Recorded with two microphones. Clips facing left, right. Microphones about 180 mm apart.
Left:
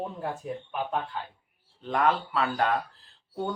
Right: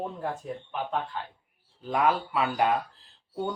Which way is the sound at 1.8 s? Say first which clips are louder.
Even; 5° right (ahead or behind).